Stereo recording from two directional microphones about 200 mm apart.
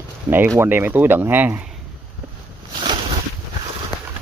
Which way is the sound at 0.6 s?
10° right (ahead or behind).